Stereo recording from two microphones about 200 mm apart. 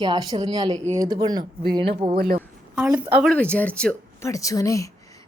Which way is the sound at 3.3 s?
5° left (ahead or behind).